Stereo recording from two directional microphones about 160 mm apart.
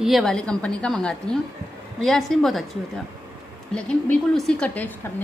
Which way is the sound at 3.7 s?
5° left (ahead or behind).